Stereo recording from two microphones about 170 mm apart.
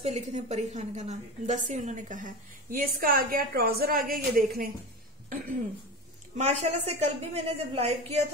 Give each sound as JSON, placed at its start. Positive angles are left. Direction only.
{"t": 0.0, "sound": "a woman's voice", "side_deg": -45}
{"t": 6.3, "sound": "a woman's voice", "side_deg": -40}